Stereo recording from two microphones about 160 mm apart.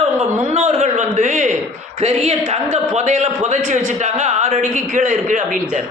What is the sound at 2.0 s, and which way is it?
A woman's voice, 40° right (ahead or behind).